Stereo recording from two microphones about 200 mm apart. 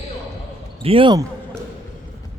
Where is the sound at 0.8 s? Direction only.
25° right (ahead or behind).